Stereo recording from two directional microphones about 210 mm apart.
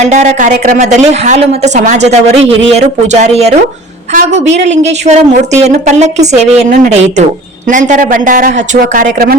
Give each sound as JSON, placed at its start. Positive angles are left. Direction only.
{"t": 0.0, "sound": "a woman's voice", "side_deg": -35}
{"t": 4.8, "sound": "a woman's voice", "side_deg": -30}